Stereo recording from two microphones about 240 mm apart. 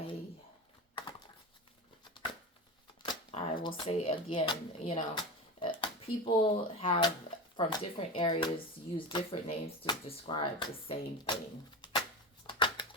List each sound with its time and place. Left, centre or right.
3.0 s shuffling cards: left
3.8 s speech: left
12.5 s a sound: centre